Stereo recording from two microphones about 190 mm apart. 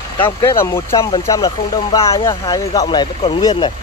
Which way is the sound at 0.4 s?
15° left (ahead or behind).